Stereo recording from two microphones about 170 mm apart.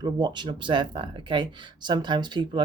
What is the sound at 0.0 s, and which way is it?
Speech, 25° right (ahead or behind).